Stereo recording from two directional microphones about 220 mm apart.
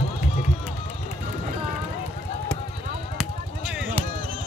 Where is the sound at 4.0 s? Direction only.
5° left (ahead or behind).